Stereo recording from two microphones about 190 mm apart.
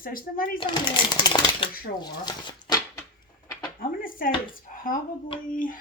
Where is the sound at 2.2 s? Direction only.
20° left (ahead or behind).